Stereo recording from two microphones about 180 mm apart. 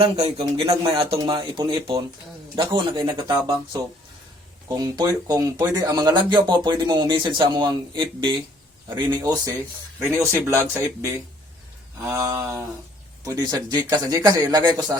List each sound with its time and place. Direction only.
0.0 s speech: 35° right (ahead or behind)
4.8 s speech: 20° right (ahead or behind)
12.1 s speech: 15° right (ahead or behind)